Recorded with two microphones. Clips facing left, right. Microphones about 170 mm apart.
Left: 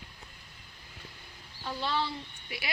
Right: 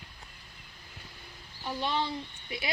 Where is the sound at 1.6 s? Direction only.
15° right (ahead or behind).